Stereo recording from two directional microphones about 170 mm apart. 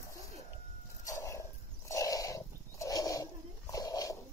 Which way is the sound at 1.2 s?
15° left (ahead or behind).